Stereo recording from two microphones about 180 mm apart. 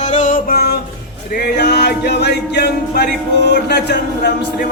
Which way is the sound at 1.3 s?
65° left (ahead or behind).